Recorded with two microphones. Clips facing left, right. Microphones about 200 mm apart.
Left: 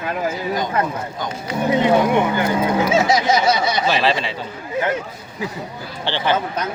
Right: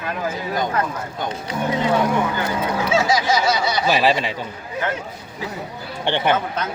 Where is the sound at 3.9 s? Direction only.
10° right (ahead or behind).